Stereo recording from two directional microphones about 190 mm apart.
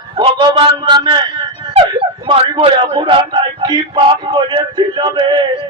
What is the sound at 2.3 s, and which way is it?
Speech, 25° right (ahead or behind).